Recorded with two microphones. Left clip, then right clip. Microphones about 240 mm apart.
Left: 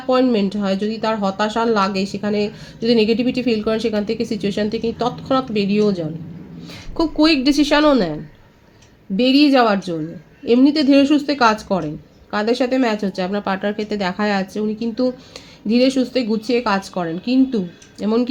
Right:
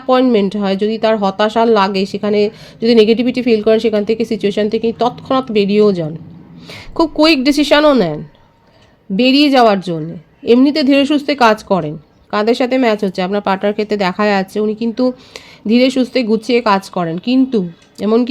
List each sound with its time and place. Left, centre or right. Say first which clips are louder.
0.1 s speech: right 5 dB; right